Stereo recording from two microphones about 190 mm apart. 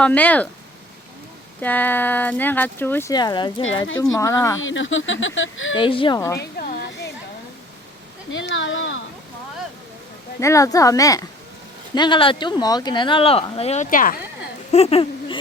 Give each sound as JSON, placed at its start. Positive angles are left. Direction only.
{"t": 0.0, "sound": "speech", "side_deg": 10}
{"t": 1.6, "sound": "speech", "side_deg": 10}
{"t": 4.6, "sound": "speech", "side_deg": 90}
{"t": 5.7, "sound": "speech", "side_deg": 25}
{"t": 6.1, "sound": "speech", "side_deg": 15}
{"t": 6.4, "sound": "a sound", "side_deg": 55}
{"t": 8.3, "sound": "speech", "side_deg": 75}
{"t": 10.4, "sound": "speech", "side_deg": 15}
{"t": 14.7, "sound": "a sound", "side_deg": 30}